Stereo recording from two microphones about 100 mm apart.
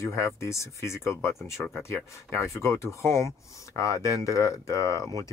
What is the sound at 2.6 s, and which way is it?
Speech, 25° left (ahead or behind).